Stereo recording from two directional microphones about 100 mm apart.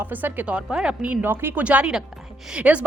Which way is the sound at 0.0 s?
20° right (ahead or behind).